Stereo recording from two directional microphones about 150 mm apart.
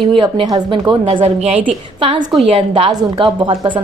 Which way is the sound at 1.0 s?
40° right (ahead or behind).